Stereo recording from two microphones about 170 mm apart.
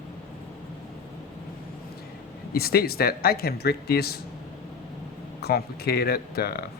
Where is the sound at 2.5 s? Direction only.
65° left (ahead or behind).